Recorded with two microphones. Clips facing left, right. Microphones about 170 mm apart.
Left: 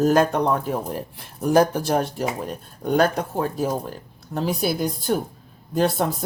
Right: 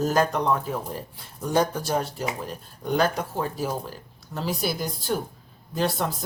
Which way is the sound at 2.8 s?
50° left (ahead or behind).